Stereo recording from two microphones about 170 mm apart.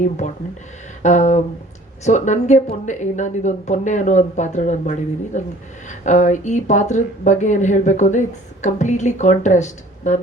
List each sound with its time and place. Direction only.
0.2 s speech: 45° left (ahead or behind)